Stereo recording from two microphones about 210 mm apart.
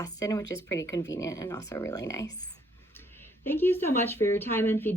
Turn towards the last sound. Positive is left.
turn(degrees=10)  # may be behind; listen again after turning